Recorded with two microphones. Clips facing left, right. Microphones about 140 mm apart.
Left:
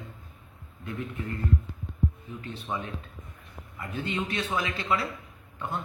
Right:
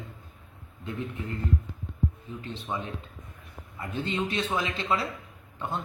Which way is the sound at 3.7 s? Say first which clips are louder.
Right 1 dB; 25° right (ahead or behind).